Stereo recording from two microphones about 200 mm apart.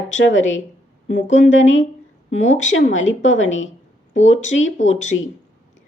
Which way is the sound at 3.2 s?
70° left (ahead or behind).